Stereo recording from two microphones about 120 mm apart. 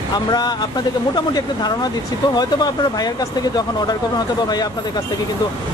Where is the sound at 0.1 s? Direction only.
35° left (ahead or behind).